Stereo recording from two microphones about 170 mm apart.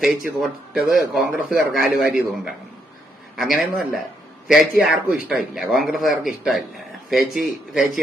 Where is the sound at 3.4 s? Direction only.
Centre (ahead or behind).